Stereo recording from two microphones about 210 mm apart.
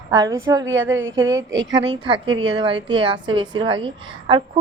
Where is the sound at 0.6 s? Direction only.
65° right (ahead or behind).